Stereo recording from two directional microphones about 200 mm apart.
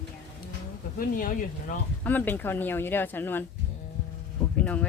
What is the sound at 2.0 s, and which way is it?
Speech, 10° left (ahead or behind).